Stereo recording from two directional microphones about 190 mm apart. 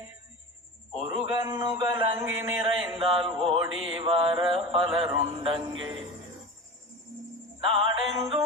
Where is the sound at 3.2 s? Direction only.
30° right (ahead or behind).